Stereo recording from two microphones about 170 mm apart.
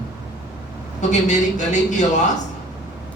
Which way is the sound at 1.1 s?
45° left (ahead or behind).